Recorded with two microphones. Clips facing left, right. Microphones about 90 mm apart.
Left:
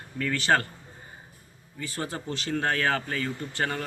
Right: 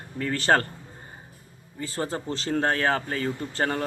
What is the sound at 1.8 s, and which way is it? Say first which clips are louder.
Speech: right 4 dB; 30° right (ahead or behind).